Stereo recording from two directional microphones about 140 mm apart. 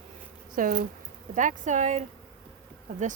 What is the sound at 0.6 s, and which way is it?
Speech, 75° right (ahead or behind).